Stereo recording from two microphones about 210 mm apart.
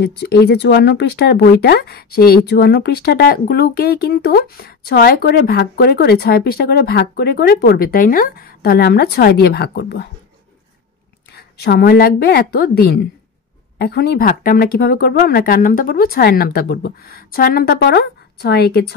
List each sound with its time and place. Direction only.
0.0 s speech: 55° left (ahead or behind)
11.3 s speech: 50° left (ahead or behind)